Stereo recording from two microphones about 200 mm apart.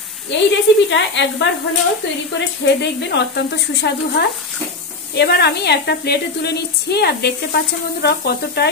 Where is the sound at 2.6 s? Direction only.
60° left (ahead or behind).